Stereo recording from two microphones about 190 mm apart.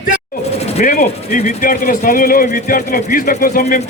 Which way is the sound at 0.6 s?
40° left (ahead or behind).